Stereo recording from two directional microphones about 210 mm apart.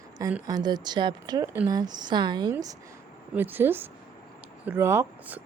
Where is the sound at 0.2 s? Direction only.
15° right (ahead or behind).